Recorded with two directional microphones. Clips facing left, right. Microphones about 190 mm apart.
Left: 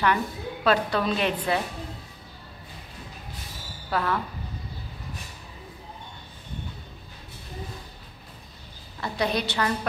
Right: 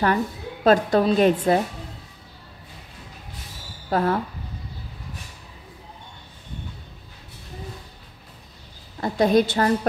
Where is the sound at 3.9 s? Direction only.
40° right (ahead or behind).